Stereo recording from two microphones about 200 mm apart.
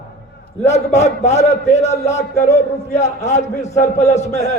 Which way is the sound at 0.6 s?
35° left (ahead or behind).